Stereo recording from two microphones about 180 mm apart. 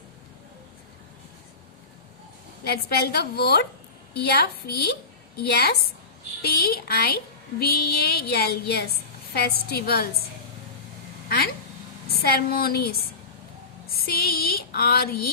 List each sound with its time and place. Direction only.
2.6 s speech: 60° left (ahead or behind)
12.0 s speech: 60° left (ahead or behind)